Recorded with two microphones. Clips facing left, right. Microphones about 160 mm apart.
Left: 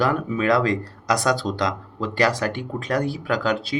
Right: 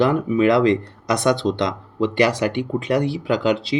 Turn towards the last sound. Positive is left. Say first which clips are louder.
# right 4 dB
turn(degrees=-25)  # may be behind; listen again after turning